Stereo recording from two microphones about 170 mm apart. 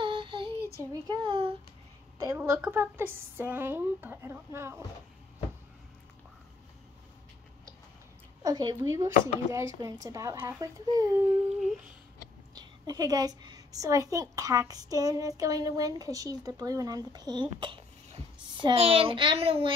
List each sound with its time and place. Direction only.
0.0 s child singing: 30° right (ahead or behind)
1.0 s a child's voice: 30° right (ahead or behind)
2.1 s speech: 15° right (ahead or behind)
8.4 s a woman's voice: 25° right (ahead or behind)
12.5 s a woman's voice: 25° right (ahead or behind)